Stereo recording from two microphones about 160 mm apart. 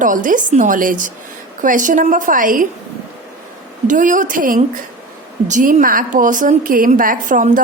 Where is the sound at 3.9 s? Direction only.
55° right (ahead or behind).